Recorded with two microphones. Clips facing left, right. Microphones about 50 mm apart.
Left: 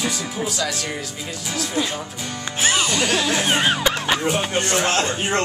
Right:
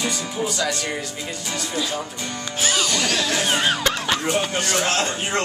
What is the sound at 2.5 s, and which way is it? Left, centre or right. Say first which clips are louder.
Music: left 2 dB; left.